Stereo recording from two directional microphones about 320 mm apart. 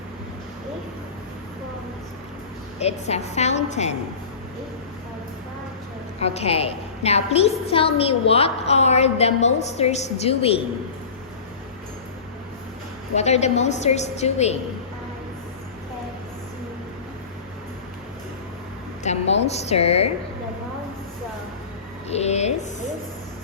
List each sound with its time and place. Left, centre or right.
2.7 s a woman's voice: centre
6.1 s a woman's voice: centre
13.1 s a woman's voice: left
19.0 s a woman's voice: centre
22.1 s a woman's voice: centre